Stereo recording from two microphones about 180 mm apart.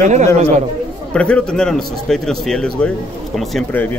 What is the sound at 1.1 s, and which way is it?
A man's voice, 5° left (ahead or behind).